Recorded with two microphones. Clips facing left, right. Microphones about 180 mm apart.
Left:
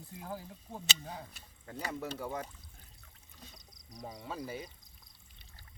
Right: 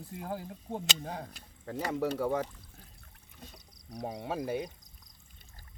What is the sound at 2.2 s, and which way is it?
Speech, 80° right.